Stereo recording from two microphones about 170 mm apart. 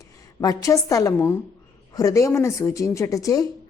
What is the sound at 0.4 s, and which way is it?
A woman's voice, 20° left (ahead or behind).